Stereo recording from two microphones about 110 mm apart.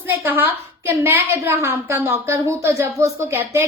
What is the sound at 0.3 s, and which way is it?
A woman's voice, 20° right (ahead or behind).